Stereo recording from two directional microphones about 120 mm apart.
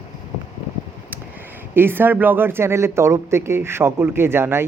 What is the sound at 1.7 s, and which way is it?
Speech, 15° right (ahead or behind).